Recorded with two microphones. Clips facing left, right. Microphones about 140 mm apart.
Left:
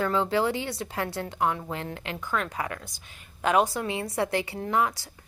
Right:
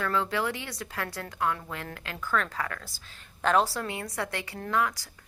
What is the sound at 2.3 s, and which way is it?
Speech, 10° left (ahead or behind).